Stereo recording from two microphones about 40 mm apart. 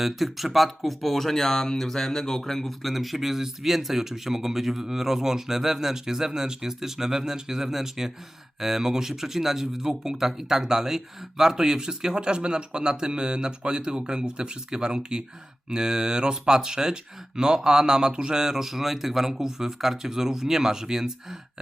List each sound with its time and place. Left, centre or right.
0.0 s speech: centre